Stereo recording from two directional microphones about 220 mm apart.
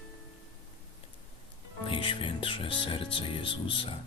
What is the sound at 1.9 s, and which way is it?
Speech, 25° left (ahead or behind).